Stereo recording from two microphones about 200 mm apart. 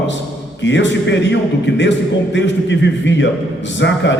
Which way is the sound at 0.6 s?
65° left (ahead or behind).